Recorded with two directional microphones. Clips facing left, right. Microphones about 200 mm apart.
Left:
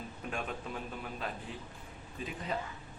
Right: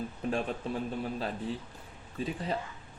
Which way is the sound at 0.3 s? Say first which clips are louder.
Right 7 dB; 35° right (ahead or behind).